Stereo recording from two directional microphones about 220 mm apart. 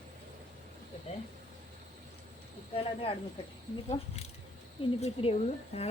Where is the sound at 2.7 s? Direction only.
25° left (ahead or behind).